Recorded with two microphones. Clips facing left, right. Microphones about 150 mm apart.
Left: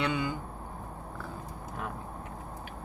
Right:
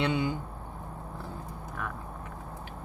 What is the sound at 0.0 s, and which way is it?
Mantra, 25° right (ahead or behind).